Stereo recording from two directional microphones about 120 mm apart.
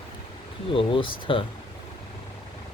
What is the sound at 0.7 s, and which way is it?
Speech, 50° left (ahead or behind).